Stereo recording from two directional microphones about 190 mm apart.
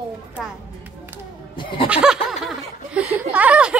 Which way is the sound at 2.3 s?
5° right (ahead or behind).